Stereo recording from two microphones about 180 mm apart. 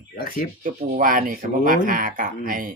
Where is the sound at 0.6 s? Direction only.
50° right (ahead or behind).